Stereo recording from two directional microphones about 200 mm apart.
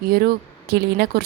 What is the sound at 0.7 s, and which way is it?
Speech, 50° right (ahead or behind).